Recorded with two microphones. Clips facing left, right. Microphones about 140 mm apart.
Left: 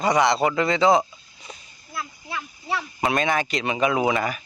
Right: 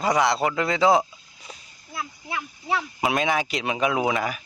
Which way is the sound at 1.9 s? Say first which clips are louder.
Right 1 dB; 20° right (ahead or behind).